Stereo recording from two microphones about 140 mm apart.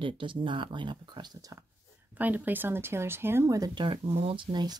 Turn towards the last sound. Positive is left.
turn(degrees=-30)  # may be behind; listen again after turning